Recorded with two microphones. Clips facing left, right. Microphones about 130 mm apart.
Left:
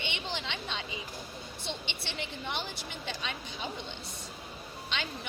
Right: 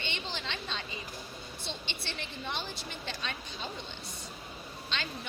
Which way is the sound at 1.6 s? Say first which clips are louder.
Left 2 dB; 15° left (ahead or behind).